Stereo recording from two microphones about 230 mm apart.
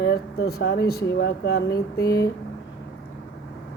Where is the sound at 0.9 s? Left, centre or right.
Left.